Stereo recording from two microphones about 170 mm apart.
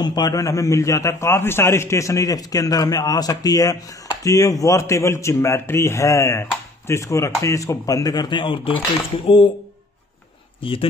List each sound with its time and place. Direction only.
0.0 s a man's voice: 25° left (ahead or behind)
10.6 s speech: 30° left (ahead or behind)